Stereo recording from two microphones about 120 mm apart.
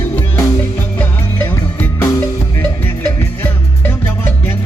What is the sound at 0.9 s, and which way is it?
Music, 15° left (ahead or behind).